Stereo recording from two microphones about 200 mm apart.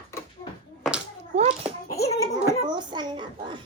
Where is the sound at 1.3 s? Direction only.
35° right (ahead or behind).